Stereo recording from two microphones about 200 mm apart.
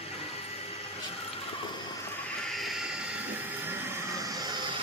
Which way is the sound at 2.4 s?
Centre (ahead or behind).